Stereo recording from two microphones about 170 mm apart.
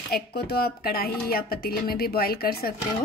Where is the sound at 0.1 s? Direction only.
70° left (ahead or behind).